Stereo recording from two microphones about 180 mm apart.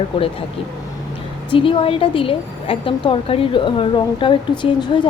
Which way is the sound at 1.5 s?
30° left (ahead or behind).